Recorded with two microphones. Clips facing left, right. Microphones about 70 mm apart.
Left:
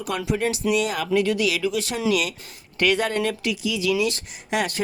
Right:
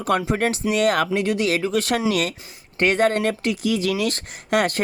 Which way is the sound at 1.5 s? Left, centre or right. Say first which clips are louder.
Right 3 dB; right.